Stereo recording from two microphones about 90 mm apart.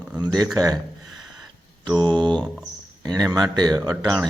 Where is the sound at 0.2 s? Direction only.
50° right (ahead or behind).